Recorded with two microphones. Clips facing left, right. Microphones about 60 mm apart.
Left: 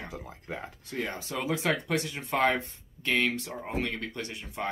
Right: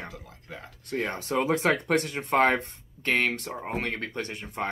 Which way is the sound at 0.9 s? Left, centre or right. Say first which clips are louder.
Right 5 dB; right.